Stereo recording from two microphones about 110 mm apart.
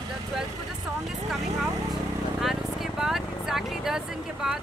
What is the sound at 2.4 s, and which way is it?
Speech, 5° right (ahead or behind).